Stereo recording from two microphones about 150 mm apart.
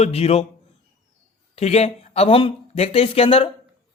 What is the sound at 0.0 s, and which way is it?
Speech, 45° left (ahead or behind).